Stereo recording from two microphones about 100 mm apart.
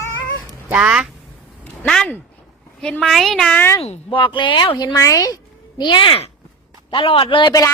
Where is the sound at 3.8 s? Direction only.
75° left (ahead or behind); by 4.9 s 50° left (ahead or behind).